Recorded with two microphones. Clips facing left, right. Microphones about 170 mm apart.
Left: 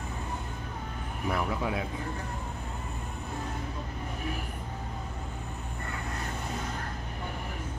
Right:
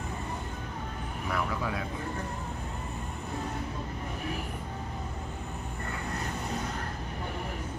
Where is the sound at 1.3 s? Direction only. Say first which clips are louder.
Left 1 dB; 25° left (ahead or behind).